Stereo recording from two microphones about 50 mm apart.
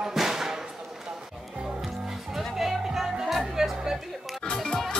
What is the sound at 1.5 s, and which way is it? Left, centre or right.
Music, centre.